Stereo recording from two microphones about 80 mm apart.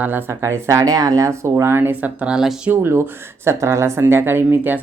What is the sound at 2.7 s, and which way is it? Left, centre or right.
Speech, right.